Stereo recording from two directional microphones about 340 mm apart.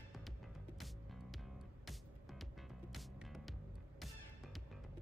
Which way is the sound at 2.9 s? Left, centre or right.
Centre.